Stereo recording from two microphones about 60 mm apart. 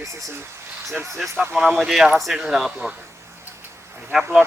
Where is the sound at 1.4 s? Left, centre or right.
Centre.